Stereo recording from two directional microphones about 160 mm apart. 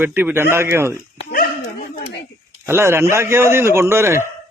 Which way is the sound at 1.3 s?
65° left (ahead or behind).